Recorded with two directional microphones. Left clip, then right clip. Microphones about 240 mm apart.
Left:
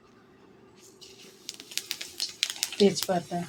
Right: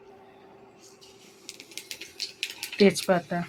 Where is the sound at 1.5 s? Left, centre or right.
Centre.